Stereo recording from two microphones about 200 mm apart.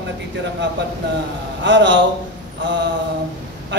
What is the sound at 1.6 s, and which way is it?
Speech, 65° right (ahead or behind).